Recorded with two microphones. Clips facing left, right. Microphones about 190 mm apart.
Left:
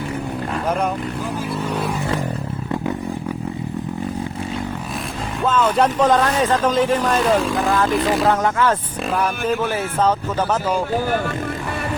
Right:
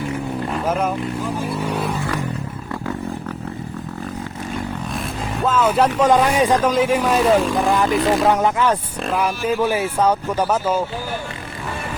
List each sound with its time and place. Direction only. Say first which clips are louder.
1.6 s vehicle: even; 5° right (ahead or behind)
5.4 s speech: even; 5° right (ahead or behind)
8.3 s speech: right 1 dB; 15° right (ahead or behind)